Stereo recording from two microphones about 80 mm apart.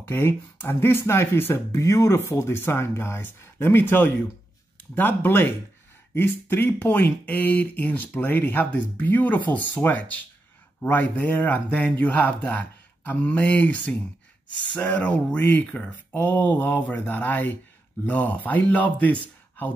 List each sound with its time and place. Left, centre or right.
0.0 s speech: left